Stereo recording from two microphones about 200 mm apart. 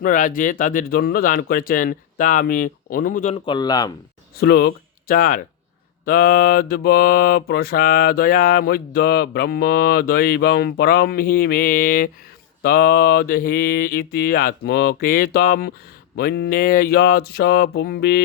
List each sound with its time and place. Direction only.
0.0 s mantra: 40° left (ahead or behind)
3.4 s speech: 20° left (ahead or behind)
4.4 s speech: 50° left (ahead or behind)
6.1 s mantra: 45° left (ahead or behind)